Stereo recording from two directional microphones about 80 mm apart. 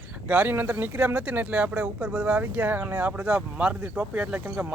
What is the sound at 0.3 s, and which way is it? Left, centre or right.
Speech, right.